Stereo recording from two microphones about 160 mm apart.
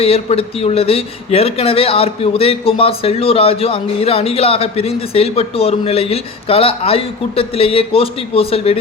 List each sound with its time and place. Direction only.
0.0 s speech: 40° left (ahead or behind)